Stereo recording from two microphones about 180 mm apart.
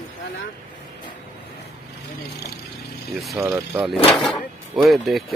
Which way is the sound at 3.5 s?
Centre (ahead or behind).